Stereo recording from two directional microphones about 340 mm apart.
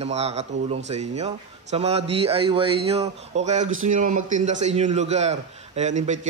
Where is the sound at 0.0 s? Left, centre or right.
Centre.